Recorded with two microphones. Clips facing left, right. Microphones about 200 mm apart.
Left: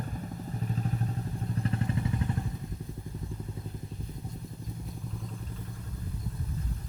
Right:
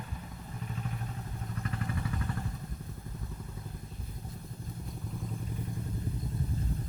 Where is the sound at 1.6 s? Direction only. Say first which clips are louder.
Left 5 dB; 30° left (ahead or behind).